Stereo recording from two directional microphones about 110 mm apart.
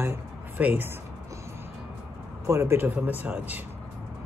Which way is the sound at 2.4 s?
25° right (ahead or behind).